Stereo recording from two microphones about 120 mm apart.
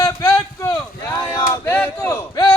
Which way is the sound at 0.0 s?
30° left (ahead or behind).